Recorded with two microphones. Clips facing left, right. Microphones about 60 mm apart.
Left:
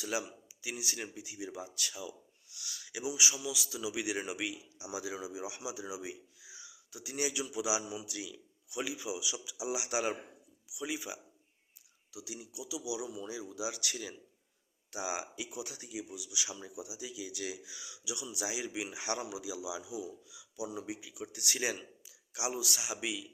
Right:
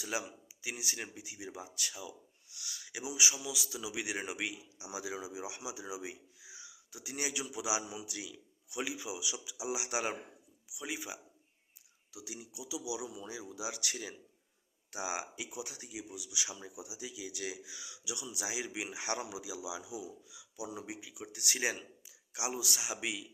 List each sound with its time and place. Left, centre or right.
0.0 s speech: right